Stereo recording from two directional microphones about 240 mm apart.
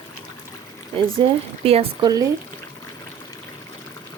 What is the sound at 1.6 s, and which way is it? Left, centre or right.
Speech, right.